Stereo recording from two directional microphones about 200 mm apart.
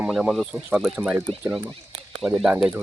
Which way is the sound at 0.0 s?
5° right (ahead or behind).